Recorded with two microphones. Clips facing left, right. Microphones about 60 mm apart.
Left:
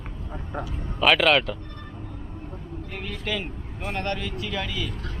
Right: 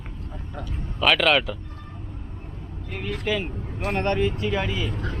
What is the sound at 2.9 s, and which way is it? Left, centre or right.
Speech, centre.